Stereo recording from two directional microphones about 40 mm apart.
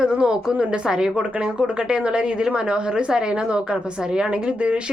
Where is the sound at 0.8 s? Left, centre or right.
Centre.